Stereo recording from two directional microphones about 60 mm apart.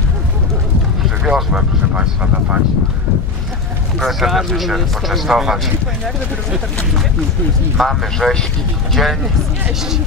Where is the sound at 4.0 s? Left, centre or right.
Centre.